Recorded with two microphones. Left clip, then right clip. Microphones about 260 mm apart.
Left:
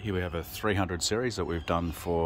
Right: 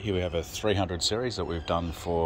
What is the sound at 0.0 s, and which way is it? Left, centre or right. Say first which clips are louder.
Speech: right 4 dB; centre.